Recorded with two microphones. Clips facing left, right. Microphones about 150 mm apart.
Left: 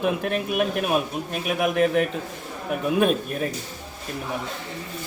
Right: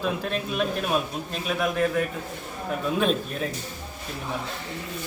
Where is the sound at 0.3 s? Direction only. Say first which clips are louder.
Left 3 dB; 15° left (ahead or behind).